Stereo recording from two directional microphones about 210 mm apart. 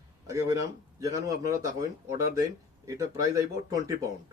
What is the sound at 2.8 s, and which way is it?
Speech, 15° right (ahead or behind).